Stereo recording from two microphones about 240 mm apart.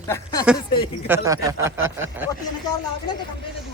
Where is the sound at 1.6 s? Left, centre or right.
Right.